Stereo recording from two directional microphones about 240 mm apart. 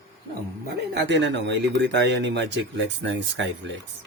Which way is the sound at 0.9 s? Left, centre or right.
Right.